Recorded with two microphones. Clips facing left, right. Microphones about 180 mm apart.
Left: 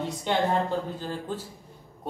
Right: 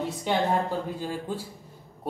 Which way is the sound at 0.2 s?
10° right (ahead or behind).